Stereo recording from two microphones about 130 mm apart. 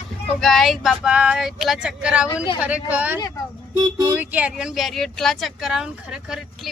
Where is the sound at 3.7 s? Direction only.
25° right (ahead or behind).